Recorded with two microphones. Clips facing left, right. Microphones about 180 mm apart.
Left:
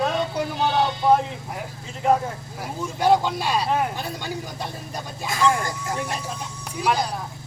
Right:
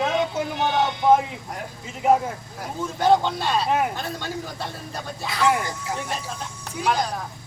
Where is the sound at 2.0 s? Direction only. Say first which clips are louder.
Right 1 dB; 5° right (ahead or behind).